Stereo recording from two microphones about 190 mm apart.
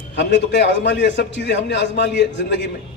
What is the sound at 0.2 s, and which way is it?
A man's voice, 65° left (ahead or behind).